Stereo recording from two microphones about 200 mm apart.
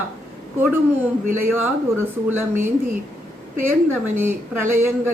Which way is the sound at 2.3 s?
10° right (ahead or behind).